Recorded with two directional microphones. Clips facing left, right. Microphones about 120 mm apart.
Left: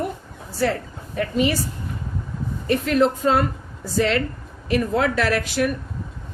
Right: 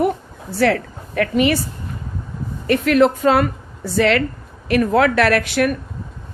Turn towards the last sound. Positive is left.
turn(degrees=-65)  # may be behind; listen again after turning